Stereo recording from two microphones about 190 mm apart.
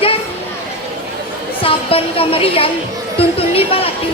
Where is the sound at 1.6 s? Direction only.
30° left (ahead or behind).